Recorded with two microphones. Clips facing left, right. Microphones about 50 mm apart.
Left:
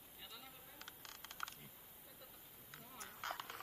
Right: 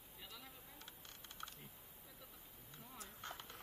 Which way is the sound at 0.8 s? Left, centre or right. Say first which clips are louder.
Left 3 dB; left.